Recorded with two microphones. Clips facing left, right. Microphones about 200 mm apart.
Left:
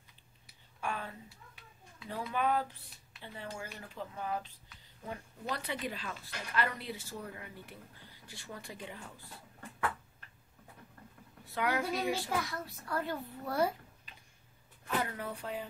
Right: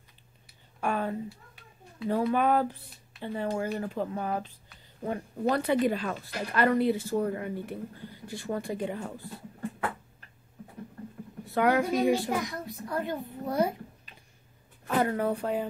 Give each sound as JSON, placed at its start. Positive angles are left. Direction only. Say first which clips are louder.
{"t": 0.7, "sound": "a sound", "louder": "right 10 dB", "side_deg": -55}
{"t": 2.1, "sound": "speech", "louder": "right 8 dB", "side_deg": -55}
{"t": 11.5, "sound": "speech", "louder": "right 9 dB", "side_deg": -50}
{"t": 12.1, "sound": "a child's voice", "louder": "right 8 dB", "side_deg": -15}
{"t": 15.0, "sound": "speech", "louder": "right 11 dB", "side_deg": -50}